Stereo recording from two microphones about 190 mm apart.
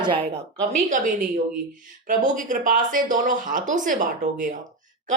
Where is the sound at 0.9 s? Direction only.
45° right (ahead or behind).